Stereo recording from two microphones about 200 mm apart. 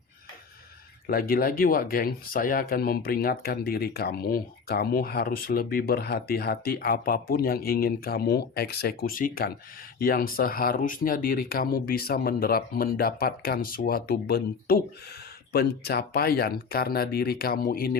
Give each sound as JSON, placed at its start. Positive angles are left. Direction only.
{"t": 1.0, "sound": "speech", "side_deg": 50}